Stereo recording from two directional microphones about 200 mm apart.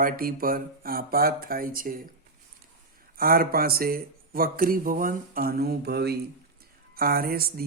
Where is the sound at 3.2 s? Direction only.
50° right (ahead or behind).